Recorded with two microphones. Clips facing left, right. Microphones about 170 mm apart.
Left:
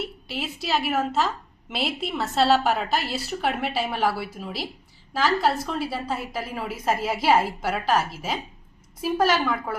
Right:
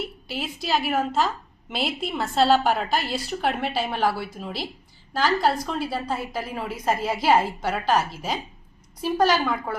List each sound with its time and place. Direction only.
0.0 s a woman's voice: centre (ahead or behind)